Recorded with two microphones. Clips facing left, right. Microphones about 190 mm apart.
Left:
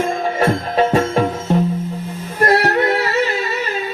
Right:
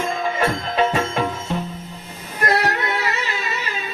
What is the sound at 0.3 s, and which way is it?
Music, 45° left (ahead or behind).